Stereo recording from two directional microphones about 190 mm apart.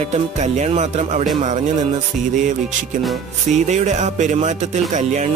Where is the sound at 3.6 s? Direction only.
40° right (ahead or behind).